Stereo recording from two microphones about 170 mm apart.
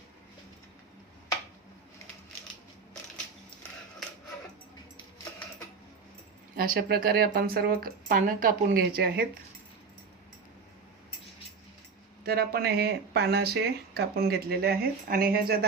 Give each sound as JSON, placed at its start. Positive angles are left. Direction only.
{"t": 6.6, "sound": "speech", "side_deg": -70}
{"t": 12.2, "sound": "speech", "side_deg": -65}